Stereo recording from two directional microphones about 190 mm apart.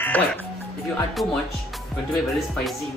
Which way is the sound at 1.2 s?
20° left (ahead or behind).